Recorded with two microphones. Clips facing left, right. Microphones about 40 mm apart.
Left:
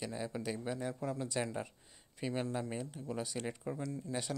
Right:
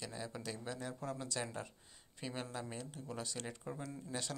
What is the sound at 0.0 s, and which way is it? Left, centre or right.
A man's voice, centre.